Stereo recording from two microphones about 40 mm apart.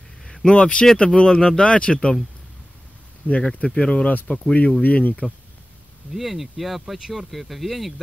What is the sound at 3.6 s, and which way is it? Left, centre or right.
Speech, left.